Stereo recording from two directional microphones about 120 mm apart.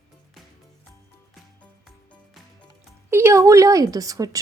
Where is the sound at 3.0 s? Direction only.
20° right (ahead or behind).